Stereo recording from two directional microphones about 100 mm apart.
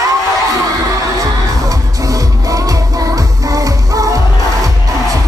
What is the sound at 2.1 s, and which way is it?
Music, 35° right (ahead or behind).